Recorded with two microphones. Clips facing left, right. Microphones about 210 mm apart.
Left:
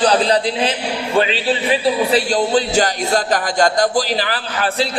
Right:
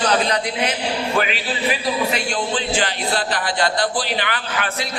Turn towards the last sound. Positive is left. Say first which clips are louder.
# left 5 dB
turn(degrees=35)  # may be behind; listen again after turning